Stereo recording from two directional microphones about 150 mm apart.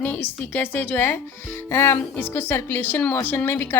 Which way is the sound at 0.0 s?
15° left (ahead or behind).